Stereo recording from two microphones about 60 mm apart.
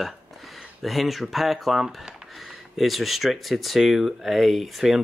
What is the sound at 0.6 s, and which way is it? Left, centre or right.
Speech, centre.